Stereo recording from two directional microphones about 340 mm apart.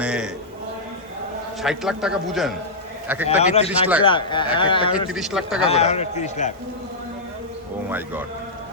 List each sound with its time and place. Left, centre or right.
0.0 s a sound: centre
1.6 s a man's voice: centre
3.2 s a man's voice: centre
3.7 s a man's voice: centre
4.0 s a man's voice: centre
5.0 s a man's voice: centre
5.6 s a man's voice: centre
7.9 s a man's voice: centre